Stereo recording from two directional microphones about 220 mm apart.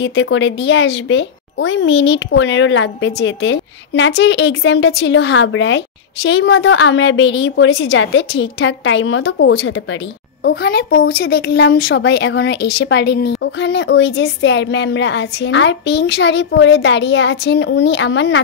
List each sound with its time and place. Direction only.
0.0 s speech: 55° left (ahead or behind)